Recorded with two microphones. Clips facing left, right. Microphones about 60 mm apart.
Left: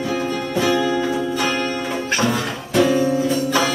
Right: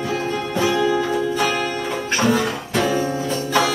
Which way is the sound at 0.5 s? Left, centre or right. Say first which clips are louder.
Even; centre.